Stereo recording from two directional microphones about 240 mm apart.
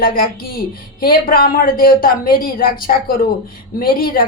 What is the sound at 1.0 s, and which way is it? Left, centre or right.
A man's voice, left.